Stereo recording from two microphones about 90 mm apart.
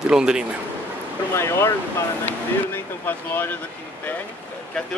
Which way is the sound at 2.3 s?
25° left (ahead or behind).